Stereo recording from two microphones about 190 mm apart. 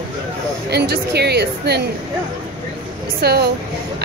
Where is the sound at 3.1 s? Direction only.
55° right (ahead or behind).